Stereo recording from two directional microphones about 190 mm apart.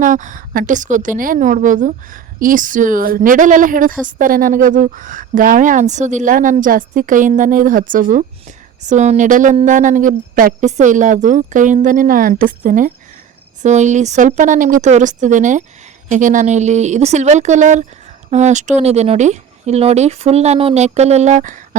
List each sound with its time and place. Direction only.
0.0 s a woman's voice: 45° right (ahead or behind)